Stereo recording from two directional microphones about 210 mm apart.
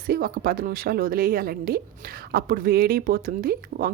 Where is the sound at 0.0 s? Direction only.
45° right (ahead or behind).